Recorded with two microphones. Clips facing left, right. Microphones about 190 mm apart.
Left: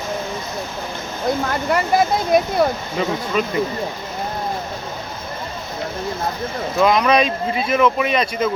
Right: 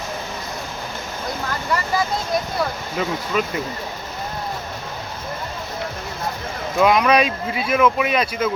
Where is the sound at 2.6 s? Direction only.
50° left (ahead or behind).